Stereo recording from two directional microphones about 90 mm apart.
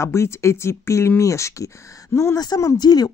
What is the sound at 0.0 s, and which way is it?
Speech, 30° left (ahead or behind).